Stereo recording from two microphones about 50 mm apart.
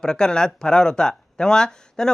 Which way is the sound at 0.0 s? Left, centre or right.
Centre.